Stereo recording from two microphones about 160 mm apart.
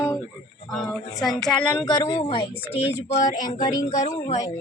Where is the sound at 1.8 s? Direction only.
30° left (ahead or behind).